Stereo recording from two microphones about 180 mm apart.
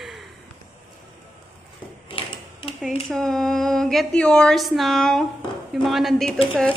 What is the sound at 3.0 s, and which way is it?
A woman's voice, centre (ahead or behind).